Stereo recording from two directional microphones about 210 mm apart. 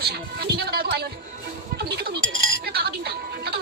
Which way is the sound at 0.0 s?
50° right (ahead or behind).